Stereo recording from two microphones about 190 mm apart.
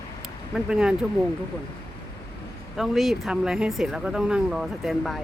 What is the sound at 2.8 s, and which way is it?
Speech, centre (ahead or behind).